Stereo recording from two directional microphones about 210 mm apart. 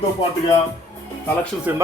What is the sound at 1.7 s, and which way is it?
Speech, 10° right (ahead or behind).